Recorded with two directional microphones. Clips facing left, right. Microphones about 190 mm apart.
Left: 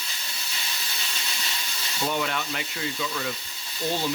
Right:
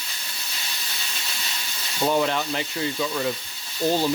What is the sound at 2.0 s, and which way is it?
Speech, 35° right (ahead or behind).